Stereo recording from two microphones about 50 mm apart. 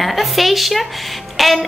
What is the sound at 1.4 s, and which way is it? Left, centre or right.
Music, centre.